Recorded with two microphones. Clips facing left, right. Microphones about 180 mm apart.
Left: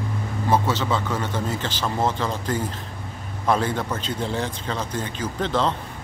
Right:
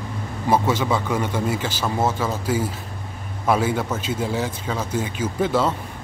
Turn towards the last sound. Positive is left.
turn(degrees=-10)  # may be behind; listen again after turning